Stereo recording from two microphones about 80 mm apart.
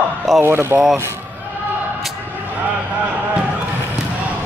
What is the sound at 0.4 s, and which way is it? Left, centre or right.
Speech, right.